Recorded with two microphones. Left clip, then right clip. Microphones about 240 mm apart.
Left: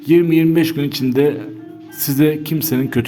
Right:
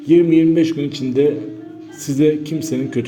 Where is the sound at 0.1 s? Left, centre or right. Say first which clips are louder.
Right 1 dB; left.